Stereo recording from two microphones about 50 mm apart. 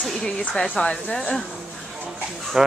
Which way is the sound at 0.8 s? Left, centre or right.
Left.